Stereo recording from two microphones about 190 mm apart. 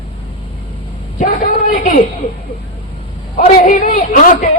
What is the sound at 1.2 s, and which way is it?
Speech, 40° left (ahead or behind).